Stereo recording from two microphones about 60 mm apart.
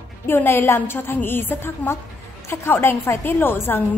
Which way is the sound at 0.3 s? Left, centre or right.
Left.